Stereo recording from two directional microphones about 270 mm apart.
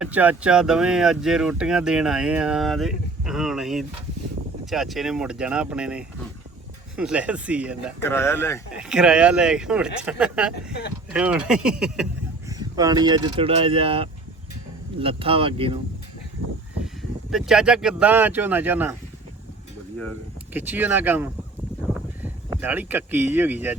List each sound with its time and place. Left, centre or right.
0.0 s speech: centre
7.9 s speech: centre
8.7 s speech: centre
10.5 s speech: left
11.1 s speech: centre
12.5 s speech: centre
17.3 s speech: centre
20.5 s speech: centre